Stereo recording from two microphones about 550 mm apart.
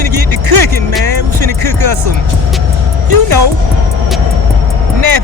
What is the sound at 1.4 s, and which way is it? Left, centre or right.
Speech, right.